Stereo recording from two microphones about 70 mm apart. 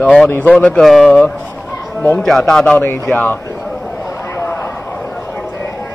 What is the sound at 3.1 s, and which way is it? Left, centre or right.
Speech, left.